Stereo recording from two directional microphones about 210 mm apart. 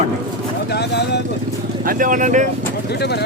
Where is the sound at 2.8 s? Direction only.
50° left (ahead or behind).